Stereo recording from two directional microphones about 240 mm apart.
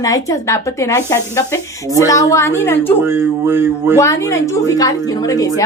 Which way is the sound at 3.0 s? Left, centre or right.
Centre.